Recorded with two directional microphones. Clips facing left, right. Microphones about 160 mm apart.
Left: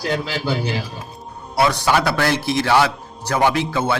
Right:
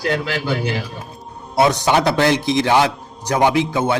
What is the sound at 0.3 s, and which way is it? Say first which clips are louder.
Speech: right 1 dB; 30° left (ahead or behind).